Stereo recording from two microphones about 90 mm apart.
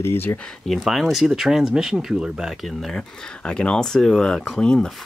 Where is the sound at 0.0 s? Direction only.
25° left (ahead or behind).